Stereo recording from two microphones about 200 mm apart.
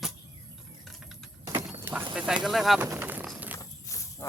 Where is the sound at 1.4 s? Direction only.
20° right (ahead or behind).